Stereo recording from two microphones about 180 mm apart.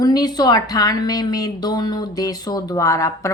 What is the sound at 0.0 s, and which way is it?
A woman's voice, 20° left (ahead or behind).